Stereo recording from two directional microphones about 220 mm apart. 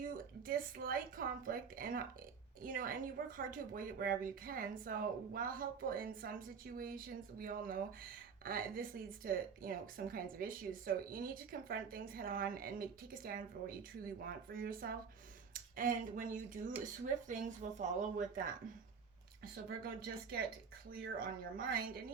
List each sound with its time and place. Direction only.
0.0 s a woman's voice: 40° right (ahead or behind)
19.8 s a woman's voice: 40° right (ahead or behind)